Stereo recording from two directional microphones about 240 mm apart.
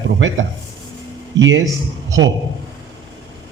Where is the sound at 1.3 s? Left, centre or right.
Right.